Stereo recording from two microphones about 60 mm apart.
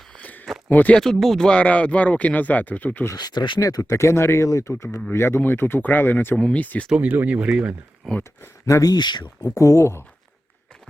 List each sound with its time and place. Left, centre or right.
0.2 s a sound: left
0.7 s speech: left
0.9 s speech: centre
1.5 s speech: left
3.1 s speech: left
3.9 s speech: left
6.3 s speech: left
7.3 s speech: centre
8.0 s speech: centre
8.6 s speech: left
9.4 s speech: left